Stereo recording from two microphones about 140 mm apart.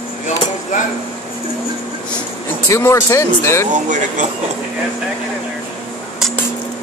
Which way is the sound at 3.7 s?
60° right (ahead or behind).